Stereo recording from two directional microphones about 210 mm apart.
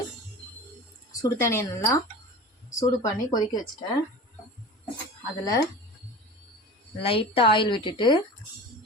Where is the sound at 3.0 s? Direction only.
20° left (ahead or behind).